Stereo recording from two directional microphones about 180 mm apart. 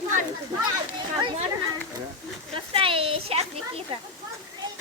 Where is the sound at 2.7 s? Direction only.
30° right (ahead or behind).